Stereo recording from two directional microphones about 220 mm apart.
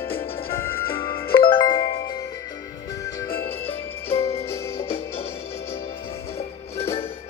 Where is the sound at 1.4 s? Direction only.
20° left (ahead or behind).